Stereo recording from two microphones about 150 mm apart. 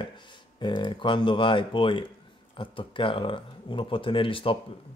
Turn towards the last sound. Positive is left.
turn(degrees=35)  # may be behind; listen again after turning